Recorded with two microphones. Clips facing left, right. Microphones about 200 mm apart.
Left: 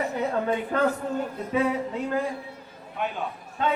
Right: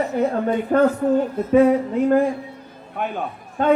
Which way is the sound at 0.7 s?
45° right (ahead or behind).